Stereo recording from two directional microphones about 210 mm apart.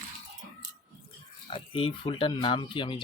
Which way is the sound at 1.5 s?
25° left (ahead or behind).